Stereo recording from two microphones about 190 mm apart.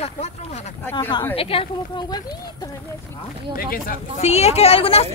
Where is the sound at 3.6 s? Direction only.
50° left (ahead or behind).